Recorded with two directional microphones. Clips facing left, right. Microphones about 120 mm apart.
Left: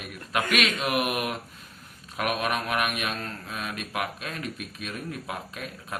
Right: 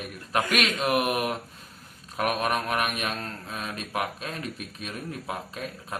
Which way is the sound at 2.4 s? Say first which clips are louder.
Right 1 dB; 35° right (ahead or behind).